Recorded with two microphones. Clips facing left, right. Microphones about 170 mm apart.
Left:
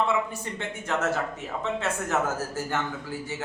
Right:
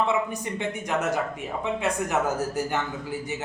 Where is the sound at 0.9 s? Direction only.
15° right (ahead or behind).